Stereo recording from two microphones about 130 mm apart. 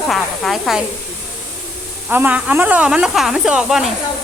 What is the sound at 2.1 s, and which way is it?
Speech, 10° right (ahead or behind).